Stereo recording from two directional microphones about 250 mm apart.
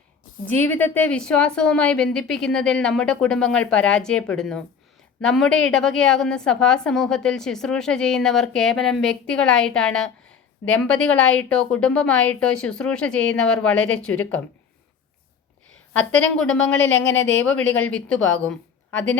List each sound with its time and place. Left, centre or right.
0.4 s a woman's voice: centre
16.0 s a woman's voice: centre
16.7 s speech: left
17.5 s a woman's voice: centre